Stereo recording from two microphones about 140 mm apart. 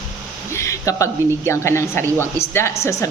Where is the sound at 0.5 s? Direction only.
20° left (ahead or behind).